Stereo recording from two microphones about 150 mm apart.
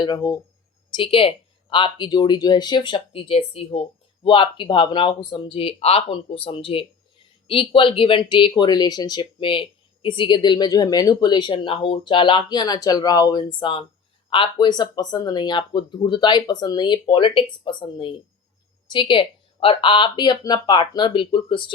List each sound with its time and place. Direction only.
0.0 s speech: 30° left (ahead or behind)